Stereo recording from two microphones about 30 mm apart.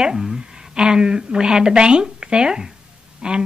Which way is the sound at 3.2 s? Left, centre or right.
Right.